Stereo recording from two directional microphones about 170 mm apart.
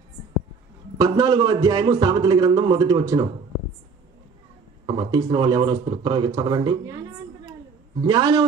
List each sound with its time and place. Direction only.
0.9 s a man's voice: 25° right (ahead or behind)
4.8 s a man's voice: 25° right (ahead or behind)
8.0 s a man's voice: 25° right (ahead or behind)